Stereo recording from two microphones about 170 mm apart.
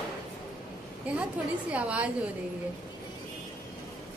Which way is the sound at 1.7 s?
5° right (ahead or behind).